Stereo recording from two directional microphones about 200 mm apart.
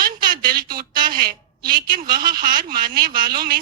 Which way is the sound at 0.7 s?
45° right (ahead or behind).